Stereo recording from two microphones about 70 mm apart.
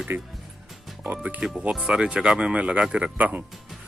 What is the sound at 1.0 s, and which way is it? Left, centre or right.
Speech, right.